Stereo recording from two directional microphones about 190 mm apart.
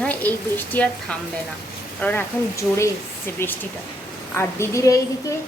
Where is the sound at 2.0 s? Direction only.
10° left (ahead or behind).